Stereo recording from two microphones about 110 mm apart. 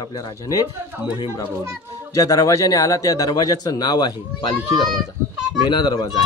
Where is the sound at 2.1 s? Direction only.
30° left (ahead or behind).